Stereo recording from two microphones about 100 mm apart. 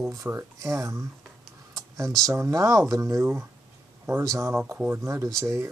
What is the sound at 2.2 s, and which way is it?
Speech, 35° right (ahead or behind).